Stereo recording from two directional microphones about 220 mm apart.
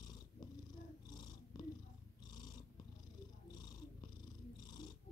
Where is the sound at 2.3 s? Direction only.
20° left (ahead or behind).